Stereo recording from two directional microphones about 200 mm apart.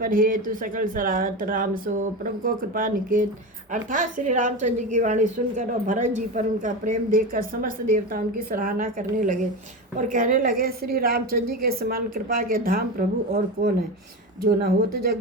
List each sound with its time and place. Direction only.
0.0 s a woman's voice: 45° right (ahead or behind)